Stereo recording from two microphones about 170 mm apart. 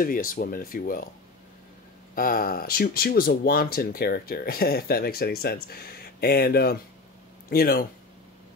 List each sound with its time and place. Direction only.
0.0 s speech: 55° left (ahead or behind)
2.1 s speech: 55° left (ahead or behind)